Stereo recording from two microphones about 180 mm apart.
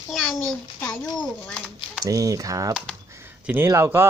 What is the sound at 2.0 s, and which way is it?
Speech, 20° right (ahead or behind).